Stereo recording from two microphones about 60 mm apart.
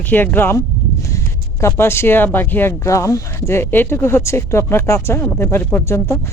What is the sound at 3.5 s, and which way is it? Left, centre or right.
Speech, left.